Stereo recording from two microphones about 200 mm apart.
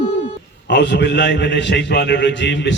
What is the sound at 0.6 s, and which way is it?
A man's voice, 60° left (ahead or behind).